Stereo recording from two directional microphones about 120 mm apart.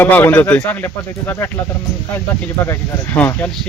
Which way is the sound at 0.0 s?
15° left (ahead or behind).